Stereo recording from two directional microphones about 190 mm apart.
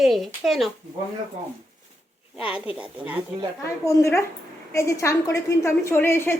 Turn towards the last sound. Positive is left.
turn(degrees=10)  # may be behind; listen again after turning